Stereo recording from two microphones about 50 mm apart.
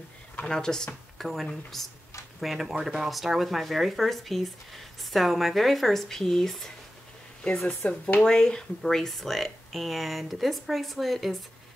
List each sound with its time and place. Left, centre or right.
0.5 s speech: centre
7.4 s speech: left
8.2 s speech: centre